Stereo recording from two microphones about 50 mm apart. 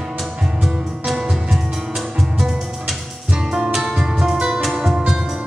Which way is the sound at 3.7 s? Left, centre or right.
Centre.